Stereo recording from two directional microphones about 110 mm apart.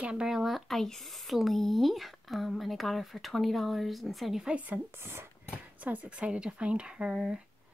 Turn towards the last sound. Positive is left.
turn(degrees=-10)  # may be behind; listen again after turning